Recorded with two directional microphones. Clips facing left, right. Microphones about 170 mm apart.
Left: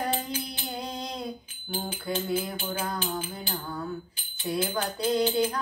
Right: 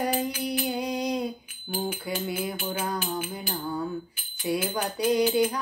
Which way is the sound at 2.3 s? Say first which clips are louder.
Even; 30° left (ahead or behind).